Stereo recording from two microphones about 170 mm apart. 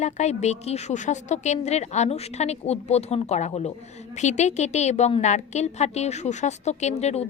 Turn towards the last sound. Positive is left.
turn(degrees=40)  # may be behind; listen again after turning